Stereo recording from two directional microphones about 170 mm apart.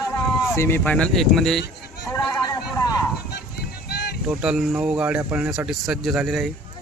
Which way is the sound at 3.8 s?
70° left (ahead or behind).